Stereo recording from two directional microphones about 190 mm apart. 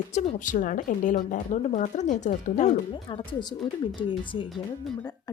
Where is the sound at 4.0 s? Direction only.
25° left (ahead or behind).